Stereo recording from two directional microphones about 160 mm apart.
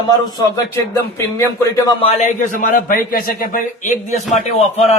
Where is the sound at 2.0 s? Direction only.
55° left (ahead or behind).